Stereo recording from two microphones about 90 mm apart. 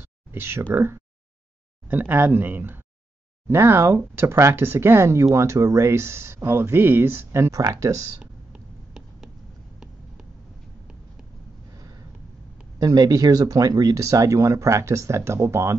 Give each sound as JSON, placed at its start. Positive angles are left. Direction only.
{"t": 0.0, "sound": "speech", "side_deg": -25}
{"t": 7.5, "sound": "speech", "side_deg": -40}
{"t": 12.7, "sound": "speech", "side_deg": -45}